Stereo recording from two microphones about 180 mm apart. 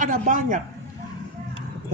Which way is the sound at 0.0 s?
45° right (ahead or behind).